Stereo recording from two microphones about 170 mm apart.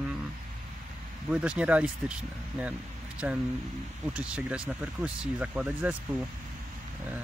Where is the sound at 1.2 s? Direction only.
5° right (ahead or behind).